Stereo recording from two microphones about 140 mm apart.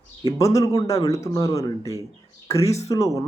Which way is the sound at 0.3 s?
25° left (ahead or behind).